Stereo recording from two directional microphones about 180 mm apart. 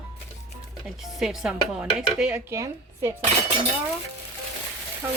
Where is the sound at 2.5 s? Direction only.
15° right (ahead or behind).